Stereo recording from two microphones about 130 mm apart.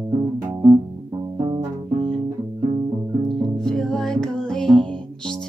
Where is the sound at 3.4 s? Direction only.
5° left (ahead or behind).